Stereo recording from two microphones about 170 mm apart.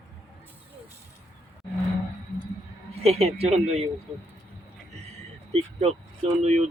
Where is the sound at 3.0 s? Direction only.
35° right (ahead or behind).